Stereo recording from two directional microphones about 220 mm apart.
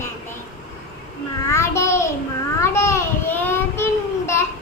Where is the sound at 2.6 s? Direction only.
10° left (ahead or behind).